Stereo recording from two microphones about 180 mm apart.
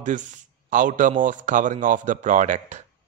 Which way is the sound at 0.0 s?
45° right (ahead or behind).